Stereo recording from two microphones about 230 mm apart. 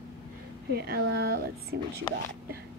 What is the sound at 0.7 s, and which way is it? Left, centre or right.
Speech, right.